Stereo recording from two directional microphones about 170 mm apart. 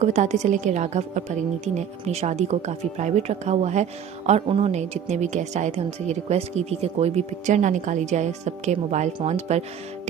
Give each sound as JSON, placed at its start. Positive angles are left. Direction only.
{"t": 0.0, "sound": "a woman's voice", "side_deg": -45}